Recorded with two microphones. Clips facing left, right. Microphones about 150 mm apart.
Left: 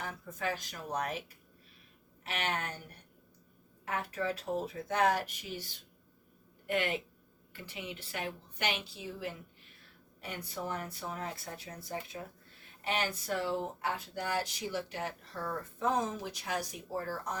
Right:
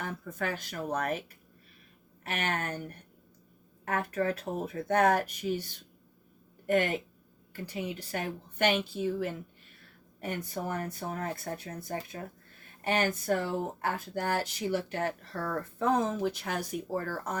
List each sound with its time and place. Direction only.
0.0 s speech: 55° right (ahead or behind)
2.2 s speech: 50° right (ahead or behind)
6.7 s speech: 45° right (ahead or behind)